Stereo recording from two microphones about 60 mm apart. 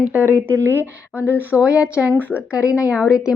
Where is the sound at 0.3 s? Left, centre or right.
Right.